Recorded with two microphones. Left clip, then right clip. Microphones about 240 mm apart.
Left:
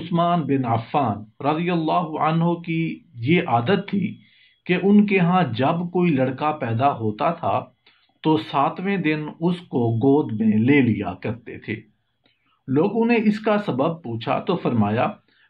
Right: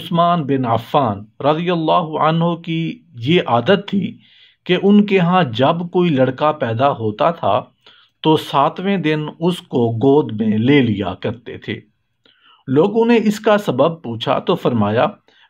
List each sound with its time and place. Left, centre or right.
0.0 s speech: right